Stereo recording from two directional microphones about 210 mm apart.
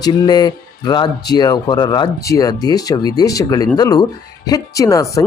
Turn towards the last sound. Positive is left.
turn(degrees=15)  # may be behind; listen again after turning